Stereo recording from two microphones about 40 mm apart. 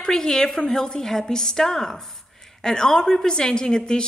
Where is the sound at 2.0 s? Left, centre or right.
Centre.